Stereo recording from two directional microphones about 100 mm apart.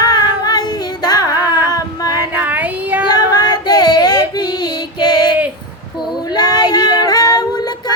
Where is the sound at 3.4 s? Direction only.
45° left (ahead or behind).